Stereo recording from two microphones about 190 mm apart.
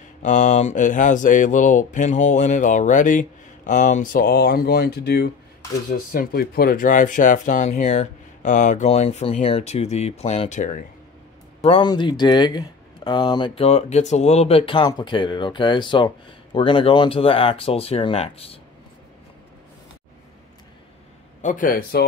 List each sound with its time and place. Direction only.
0.2 s speech: 40° left (ahead or behind)
11.6 s speech: 25° left (ahead or behind)
21.4 s speech: 45° left (ahead or behind)